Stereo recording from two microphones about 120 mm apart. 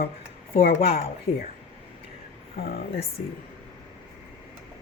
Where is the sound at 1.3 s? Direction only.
55° left (ahead or behind).